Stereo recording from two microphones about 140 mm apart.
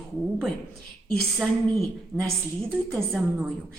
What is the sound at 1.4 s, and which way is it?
Speech, centre (ahead or behind).